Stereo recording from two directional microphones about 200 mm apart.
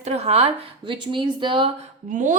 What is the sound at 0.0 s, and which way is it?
A woman's voice, 30° right (ahead or behind).